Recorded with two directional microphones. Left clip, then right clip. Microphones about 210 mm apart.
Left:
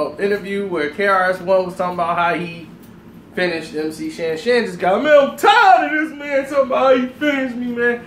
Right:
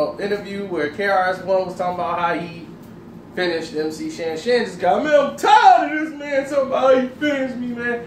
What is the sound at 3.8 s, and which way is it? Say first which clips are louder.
Speech: left 1 dB; 5° right (ahead or behind).